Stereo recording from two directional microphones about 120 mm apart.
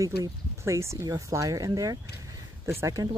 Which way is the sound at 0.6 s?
25° right (ahead or behind).